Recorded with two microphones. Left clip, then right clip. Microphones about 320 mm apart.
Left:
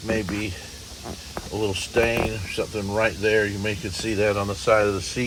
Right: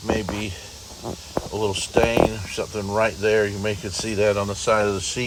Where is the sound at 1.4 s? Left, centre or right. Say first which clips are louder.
Right 9 dB; right.